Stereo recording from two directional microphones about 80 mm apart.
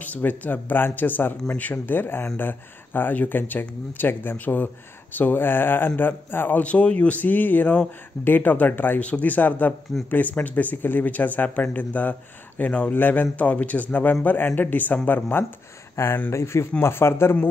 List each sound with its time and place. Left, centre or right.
0.0 s speech: left